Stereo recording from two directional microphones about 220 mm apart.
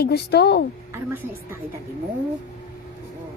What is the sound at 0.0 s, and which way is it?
Speech, 45° left (ahead or behind).